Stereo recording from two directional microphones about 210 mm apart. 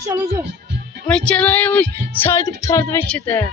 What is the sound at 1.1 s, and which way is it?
A woman's voice, 5° left (ahead or behind).